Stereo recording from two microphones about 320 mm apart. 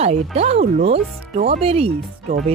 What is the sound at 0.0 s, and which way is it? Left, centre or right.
Speech, centre.